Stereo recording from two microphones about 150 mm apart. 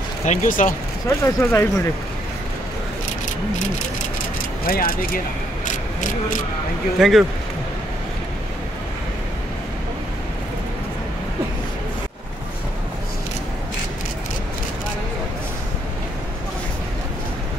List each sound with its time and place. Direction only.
0.2 s speech: 55° left (ahead or behind)
1.0 s speech: 20° left (ahead or behind)
4.6 s speech: 75° left (ahead or behind)
5.9 s speech: 60° left (ahead or behind)
7.0 s speech: centre (ahead or behind)